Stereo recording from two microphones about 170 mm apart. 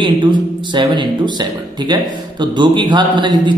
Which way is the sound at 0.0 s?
30° right (ahead or behind).